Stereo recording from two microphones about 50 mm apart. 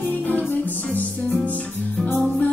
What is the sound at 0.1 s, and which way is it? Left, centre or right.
Music, left.